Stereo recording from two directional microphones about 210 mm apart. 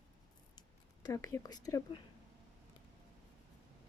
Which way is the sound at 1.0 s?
15° left (ahead or behind).